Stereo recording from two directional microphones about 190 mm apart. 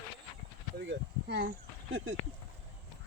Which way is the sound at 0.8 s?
65° right (ahead or behind).